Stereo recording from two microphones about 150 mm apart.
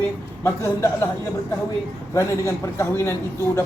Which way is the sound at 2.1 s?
20° left (ahead or behind).